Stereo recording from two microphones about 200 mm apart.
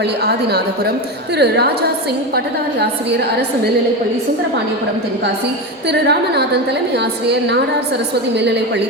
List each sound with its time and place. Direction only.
0.0 s a woman's voice: 55° right (ahead or behind)
5.9 s a woman's voice: 55° right (ahead or behind)